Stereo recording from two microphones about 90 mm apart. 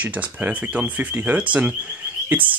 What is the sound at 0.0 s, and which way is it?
Speech, 15° right (ahead or behind).